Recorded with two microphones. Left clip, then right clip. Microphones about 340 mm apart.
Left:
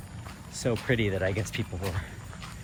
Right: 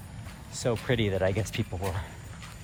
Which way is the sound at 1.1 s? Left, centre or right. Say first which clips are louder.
Right 2 dB; right.